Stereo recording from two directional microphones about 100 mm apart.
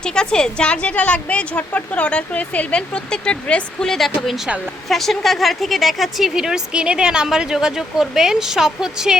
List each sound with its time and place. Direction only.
0.0 s a woman's voice: 10° left (ahead or behind)